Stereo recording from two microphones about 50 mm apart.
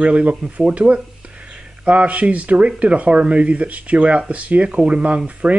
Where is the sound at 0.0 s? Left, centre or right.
Right.